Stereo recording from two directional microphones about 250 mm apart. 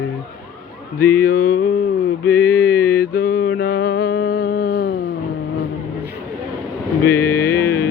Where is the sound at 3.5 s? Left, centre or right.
Left.